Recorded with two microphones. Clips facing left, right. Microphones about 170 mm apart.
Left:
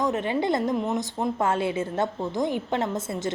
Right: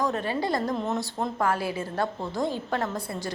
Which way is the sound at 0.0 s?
20° left (ahead or behind).